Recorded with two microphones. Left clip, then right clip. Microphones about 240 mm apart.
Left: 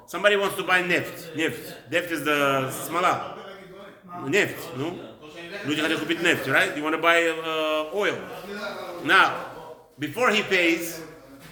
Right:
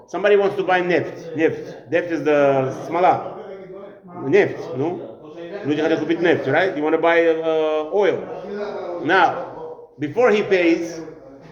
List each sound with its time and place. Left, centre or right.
0.1 s a man's voice: centre
4.3 s a man's voice: centre